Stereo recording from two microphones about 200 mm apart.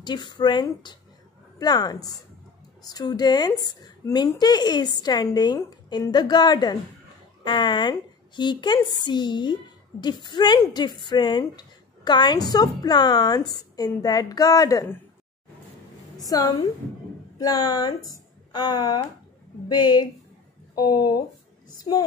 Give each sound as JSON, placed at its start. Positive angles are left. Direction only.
{"t": 0.0, "sound": "a woman's voice", "side_deg": 20}
{"t": 16.3, "sound": "a woman's voice", "side_deg": 20}